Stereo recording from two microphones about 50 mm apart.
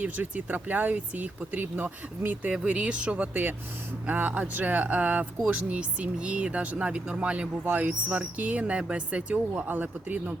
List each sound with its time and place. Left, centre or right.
0.0 s speech: right
2.5 s speech: right
9.6 s speech: right